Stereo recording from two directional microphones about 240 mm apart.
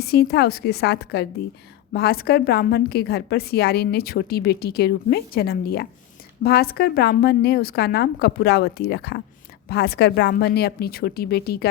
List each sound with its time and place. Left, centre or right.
0.0 s a woman's voice: left